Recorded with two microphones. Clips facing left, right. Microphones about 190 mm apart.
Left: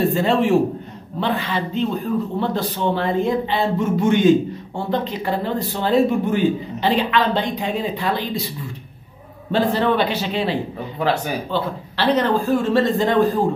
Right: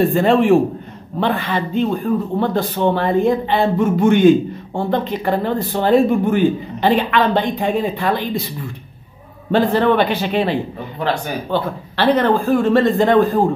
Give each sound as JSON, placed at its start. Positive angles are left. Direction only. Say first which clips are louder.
{"t": 0.1, "sound": "a man's voice", "louder": "right 4 dB", "side_deg": -55}
{"t": 9.5, "sound": "a man's voice", "louder": "right 4 dB", "side_deg": -55}
{"t": 11.0, "sound": "speech", "louder": "even", "side_deg": 10}
{"t": 11.5, "sound": "a man's voice", "louder": "right 3 dB", "side_deg": -55}